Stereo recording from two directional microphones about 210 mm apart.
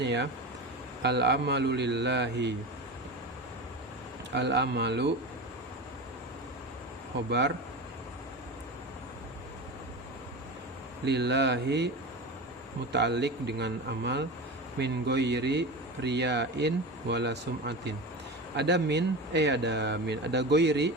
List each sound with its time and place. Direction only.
0.0 s speech: 55° right (ahead or behind)
4.4 s speech: 55° right (ahead or behind)
7.3 s speech: 55° right (ahead or behind)
11.0 s speech: 55° right (ahead or behind)
12.9 s speech: 55° right (ahead or behind)